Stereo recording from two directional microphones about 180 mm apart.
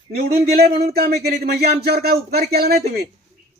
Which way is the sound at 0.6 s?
60° right (ahead or behind).